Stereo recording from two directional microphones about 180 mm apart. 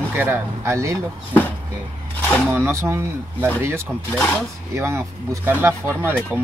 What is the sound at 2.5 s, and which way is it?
Speech, 15° right (ahead or behind).